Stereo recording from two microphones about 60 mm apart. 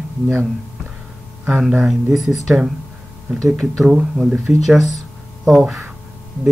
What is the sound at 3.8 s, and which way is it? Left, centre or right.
Speech, centre.